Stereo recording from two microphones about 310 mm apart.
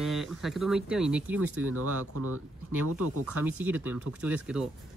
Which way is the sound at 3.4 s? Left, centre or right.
Centre.